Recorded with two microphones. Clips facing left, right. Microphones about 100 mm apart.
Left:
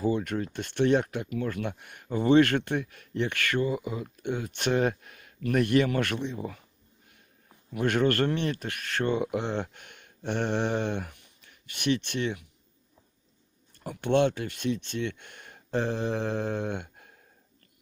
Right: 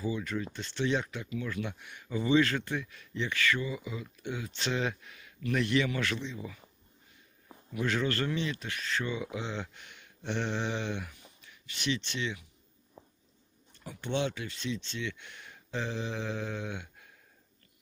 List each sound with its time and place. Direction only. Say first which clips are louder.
0.0 s speech: left 6 dB; 55° left (ahead or behind)
7.7 s speech: left 6 dB; 55° left (ahead or behind)
13.7 s speech: left 9 dB; 55° left (ahead or behind)